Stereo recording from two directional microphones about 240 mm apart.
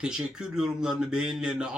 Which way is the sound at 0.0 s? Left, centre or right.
Centre.